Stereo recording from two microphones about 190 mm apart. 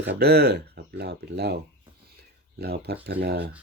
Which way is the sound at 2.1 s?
60° right (ahead or behind).